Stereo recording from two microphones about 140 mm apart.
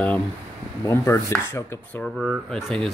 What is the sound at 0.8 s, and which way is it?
Speech, 20° left (ahead or behind).